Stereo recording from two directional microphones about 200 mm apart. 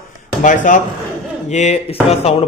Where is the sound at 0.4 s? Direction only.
40° left (ahead or behind).